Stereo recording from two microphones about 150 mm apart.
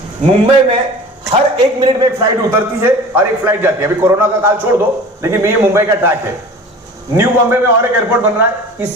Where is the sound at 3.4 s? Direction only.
15° right (ahead or behind).